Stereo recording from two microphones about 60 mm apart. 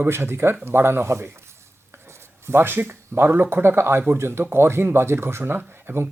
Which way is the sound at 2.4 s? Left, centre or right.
Right.